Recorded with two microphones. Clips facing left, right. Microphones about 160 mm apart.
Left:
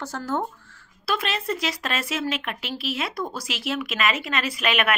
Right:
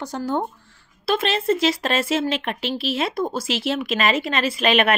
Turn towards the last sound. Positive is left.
turn(degrees=-30)  # may be behind; listen again after turning